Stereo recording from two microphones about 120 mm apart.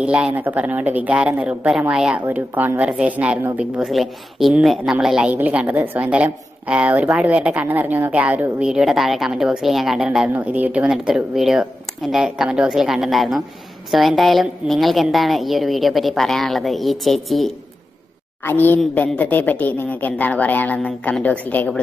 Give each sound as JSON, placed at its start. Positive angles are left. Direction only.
{"t": 0.0, "sound": "a woman's voice", "side_deg": -10}
{"t": 18.4, "sound": "speech", "side_deg": 15}